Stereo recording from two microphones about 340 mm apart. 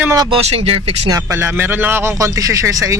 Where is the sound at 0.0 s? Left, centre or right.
Centre.